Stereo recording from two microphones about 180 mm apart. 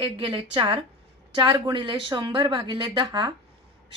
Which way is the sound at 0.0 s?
30° right (ahead or behind).